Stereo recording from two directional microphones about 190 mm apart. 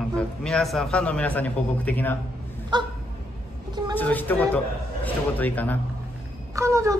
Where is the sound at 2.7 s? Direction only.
25° right (ahead or behind).